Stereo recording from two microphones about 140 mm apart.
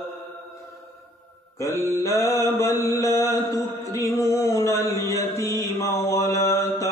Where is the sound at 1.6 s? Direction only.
20° left (ahead or behind).